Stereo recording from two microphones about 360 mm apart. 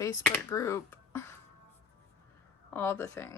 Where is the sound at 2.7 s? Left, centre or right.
Centre.